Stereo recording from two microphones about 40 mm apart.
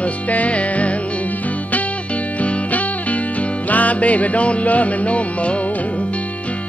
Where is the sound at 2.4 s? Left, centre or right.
Left.